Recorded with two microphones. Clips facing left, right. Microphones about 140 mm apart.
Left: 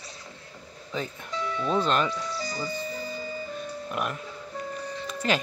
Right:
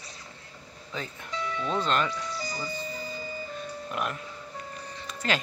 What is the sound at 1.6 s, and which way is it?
Speech, 10° left (ahead or behind).